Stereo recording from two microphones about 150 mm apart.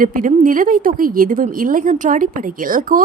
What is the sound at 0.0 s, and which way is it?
A woman's voice, 65° right (ahead or behind).